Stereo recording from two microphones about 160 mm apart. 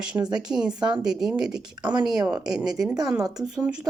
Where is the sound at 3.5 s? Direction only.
5° right (ahead or behind).